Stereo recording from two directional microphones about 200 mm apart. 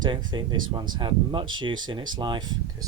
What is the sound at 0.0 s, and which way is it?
Speech, 20° right (ahead or behind).